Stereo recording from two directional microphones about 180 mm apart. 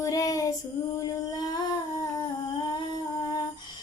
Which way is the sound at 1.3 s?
20° left (ahead or behind).